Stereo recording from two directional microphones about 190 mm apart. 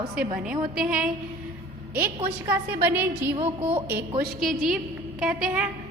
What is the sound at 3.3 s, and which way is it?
Speech, 30° right (ahead or behind).